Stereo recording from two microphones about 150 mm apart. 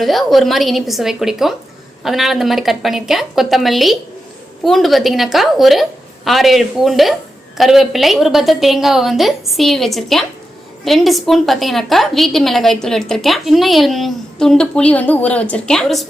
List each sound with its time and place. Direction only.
0.0 s a woman's voice: centre (ahead or behind)